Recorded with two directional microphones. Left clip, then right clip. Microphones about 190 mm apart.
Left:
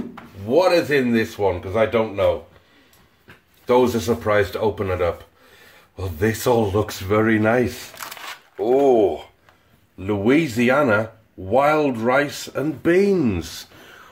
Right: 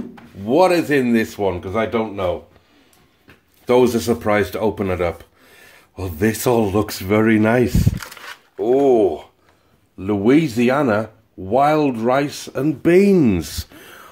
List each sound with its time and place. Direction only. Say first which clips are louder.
0.5 s speech: right 2 dB; 45° right (ahead or behind); by 2.2 s 25° right (ahead or behind)
3.6 s speech: right 2 dB; 40° right (ahead or behind)